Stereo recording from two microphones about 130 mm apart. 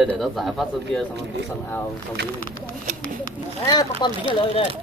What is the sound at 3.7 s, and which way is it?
Speech, 30° left (ahead or behind).